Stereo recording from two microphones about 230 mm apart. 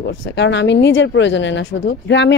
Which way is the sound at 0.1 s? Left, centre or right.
Left.